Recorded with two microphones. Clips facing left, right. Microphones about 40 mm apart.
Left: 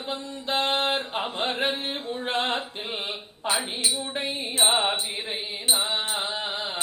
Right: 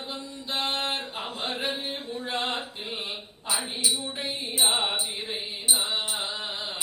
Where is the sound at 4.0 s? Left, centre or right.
Left.